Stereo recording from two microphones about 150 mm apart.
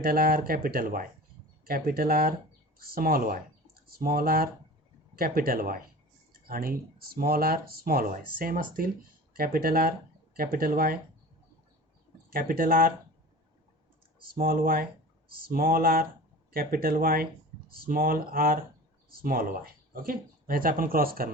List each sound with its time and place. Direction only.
0.0 s speech: 80° right
1.6 s speech: 85° right
3.8 s speech: 85° right
9.3 s speech: 85° right
12.3 s speech: 70° right (ahead or behind)
14.2 s speech: 80° right